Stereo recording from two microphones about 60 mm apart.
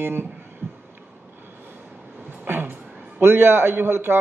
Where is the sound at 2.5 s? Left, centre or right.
Right.